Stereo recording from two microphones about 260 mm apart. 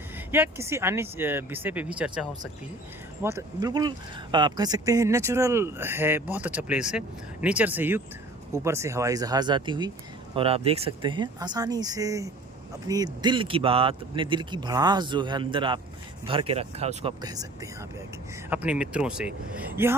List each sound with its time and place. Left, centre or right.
0.3 s speech: centre